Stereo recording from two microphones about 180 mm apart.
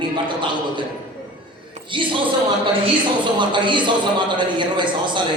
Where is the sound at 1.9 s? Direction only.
25° right (ahead or behind).